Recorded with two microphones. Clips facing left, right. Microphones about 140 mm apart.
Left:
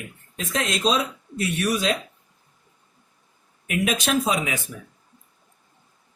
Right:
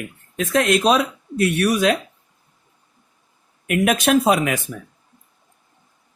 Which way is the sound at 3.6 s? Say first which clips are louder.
Right 6 dB; 60° right (ahead or behind).